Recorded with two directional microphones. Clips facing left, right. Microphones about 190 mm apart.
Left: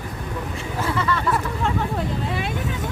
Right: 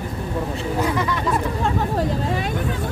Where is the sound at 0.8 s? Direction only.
15° right (ahead or behind).